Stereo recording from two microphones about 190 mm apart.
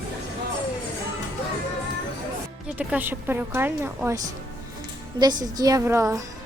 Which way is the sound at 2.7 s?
10° right (ahead or behind).